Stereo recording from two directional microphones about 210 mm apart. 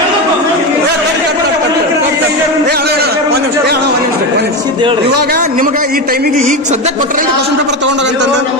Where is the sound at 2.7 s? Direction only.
50° right (ahead or behind).